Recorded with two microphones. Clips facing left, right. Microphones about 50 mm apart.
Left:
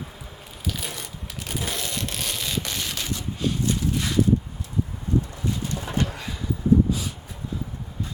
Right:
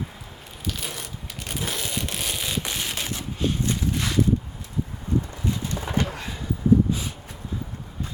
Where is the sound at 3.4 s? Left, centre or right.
Right.